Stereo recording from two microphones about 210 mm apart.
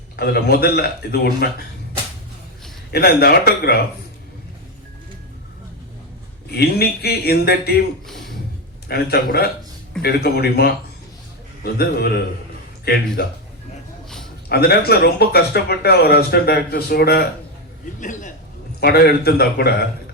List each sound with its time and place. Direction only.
0.2 s speech: 50° left (ahead or behind)
2.9 s speech: 45° left (ahead or behind)
6.5 s speech: 50° left (ahead or behind)
8.9 s speech: 50° left (ahead or behind)
14.5 s speech: 50° left (ahead or behind)
18.0 s a man's voice: 35° left (ahead or behind)
18.8 s speech: 50° left (ahead or behind)